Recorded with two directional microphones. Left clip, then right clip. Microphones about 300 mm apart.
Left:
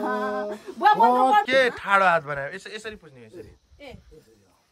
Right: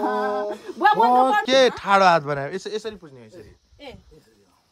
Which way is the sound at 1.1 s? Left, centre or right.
Centre.